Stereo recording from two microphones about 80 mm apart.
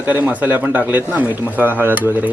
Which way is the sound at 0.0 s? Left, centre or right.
Right.